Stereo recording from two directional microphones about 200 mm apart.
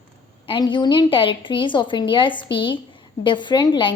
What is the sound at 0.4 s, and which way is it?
A woman's voice, 25° left (ahead or behind).